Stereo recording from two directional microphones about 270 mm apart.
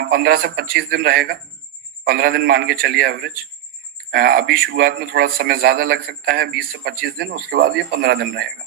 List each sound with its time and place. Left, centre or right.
0.0 s a man's voice: right